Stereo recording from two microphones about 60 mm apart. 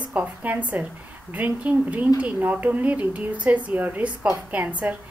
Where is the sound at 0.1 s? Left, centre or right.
Right.